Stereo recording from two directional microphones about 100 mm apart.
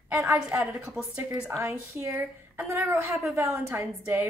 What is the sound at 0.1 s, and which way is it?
Speech, 30° right (ahead or behind).